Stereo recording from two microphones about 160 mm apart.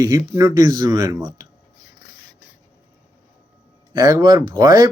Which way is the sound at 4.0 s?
20° right (ahead or behind).